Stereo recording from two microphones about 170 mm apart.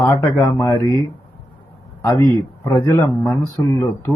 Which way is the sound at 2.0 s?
20° left (ahead or behind).